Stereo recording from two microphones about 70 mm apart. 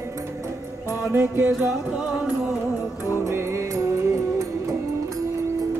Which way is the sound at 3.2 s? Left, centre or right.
Right.